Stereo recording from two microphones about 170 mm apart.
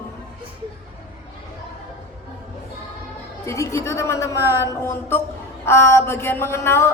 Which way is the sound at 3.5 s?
15° left (ahead or behind).